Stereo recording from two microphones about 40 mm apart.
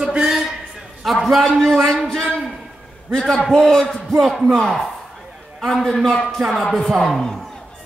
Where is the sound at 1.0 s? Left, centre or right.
Centre.